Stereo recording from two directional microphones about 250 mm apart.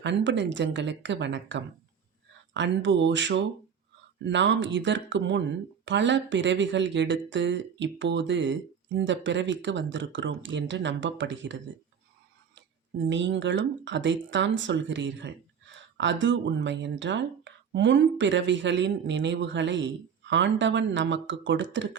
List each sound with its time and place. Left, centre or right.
0.0 s speech: right
13.1 s speech: right